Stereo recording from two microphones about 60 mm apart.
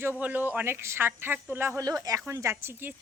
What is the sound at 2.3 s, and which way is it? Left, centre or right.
Speech, right.